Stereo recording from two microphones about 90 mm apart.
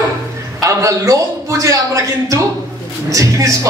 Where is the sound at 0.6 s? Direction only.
35° right (ahead or behind).